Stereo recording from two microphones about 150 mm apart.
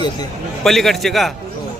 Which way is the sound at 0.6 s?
Centre (ahead or behind).